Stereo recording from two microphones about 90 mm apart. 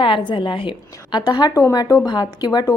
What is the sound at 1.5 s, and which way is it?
A woman's voice, 40° left (ahead or behind).